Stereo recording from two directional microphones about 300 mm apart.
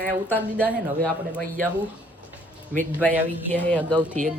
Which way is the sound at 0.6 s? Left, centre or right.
Centre.